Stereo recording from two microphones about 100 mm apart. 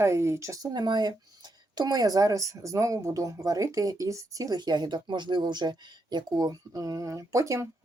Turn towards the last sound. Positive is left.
turn(degrees=-35)  # may be behind; listen again after turning